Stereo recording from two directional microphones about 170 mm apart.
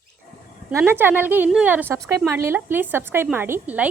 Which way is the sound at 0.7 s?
15° right (ahead or behind).